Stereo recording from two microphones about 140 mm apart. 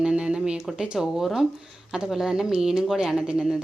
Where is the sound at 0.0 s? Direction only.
5° right (ahead or behind).